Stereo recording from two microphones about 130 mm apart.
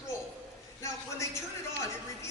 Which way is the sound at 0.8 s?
25° left (ahead or behind).